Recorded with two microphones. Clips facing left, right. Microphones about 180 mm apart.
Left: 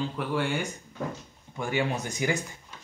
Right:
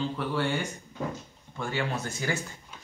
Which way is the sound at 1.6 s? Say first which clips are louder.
Left 3 dB; 15° left (ahead or behind).